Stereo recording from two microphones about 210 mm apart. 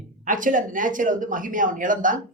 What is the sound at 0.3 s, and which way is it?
Speech, 40° right (ahead or behind).